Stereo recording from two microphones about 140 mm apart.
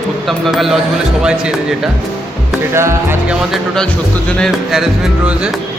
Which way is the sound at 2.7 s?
20° right (ahead or behind).